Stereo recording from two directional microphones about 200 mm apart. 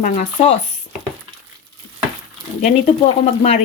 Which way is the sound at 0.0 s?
35° left (ahead or behind).